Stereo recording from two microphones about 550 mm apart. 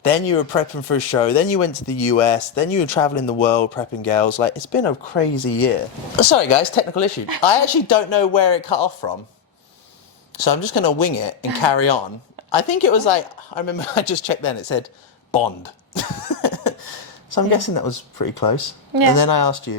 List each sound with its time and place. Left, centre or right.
0.0 s speech: left
7.4 s speech: left
10.3 s speech: left
13.6 s speech: left